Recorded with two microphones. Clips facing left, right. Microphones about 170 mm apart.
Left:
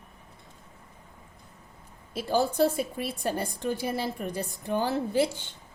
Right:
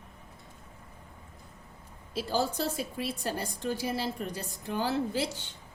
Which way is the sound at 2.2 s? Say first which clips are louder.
Left 6 dB; 55° left (ahead or behind).